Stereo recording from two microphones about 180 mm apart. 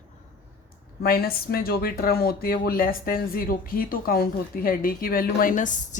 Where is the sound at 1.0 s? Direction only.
60° left (ahead or behind).